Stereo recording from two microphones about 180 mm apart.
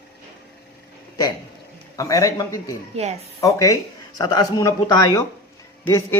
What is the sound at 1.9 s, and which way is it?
Speech, 20° left (ahead or behind).